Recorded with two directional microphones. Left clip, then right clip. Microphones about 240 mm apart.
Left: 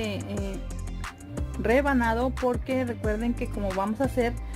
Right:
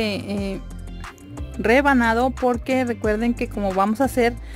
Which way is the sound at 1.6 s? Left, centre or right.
Right.